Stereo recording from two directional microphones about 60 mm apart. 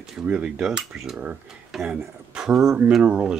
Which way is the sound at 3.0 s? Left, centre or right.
Right.